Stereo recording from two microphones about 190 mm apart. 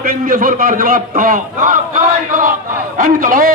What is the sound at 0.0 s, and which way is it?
A man's voice, 50° right (ahead or behind).